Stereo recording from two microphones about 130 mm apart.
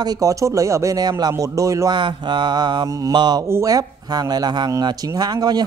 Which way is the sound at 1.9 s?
35° right (ahead or behind).